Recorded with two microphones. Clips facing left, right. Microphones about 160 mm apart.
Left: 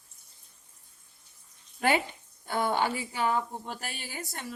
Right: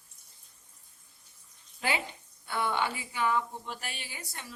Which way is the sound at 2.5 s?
40° left (ahead or behind).